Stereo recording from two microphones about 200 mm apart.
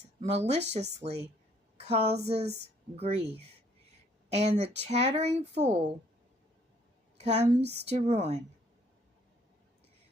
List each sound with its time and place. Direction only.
0.0 s a sound: 35° right (ahead or behind)
0.7 s speech: 35° right (ahead or behind)
4.3 s speech: 35° right (ahead or behind)
7.2 s speech: 35° right (ahead or behind)